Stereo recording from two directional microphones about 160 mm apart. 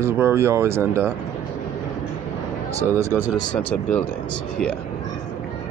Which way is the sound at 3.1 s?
5° left (ahead or behind).